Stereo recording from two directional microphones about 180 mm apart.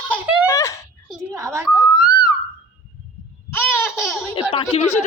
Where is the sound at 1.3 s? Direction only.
15° right (ahead or behind).